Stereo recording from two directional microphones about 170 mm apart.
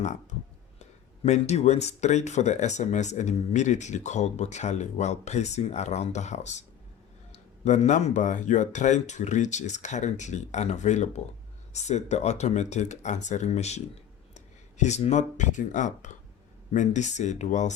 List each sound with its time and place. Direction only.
0.0 s speech: 45° left (ahead or behind)